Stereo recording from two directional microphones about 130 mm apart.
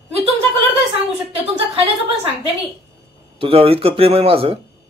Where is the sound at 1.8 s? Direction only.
45° right (ahead or behind).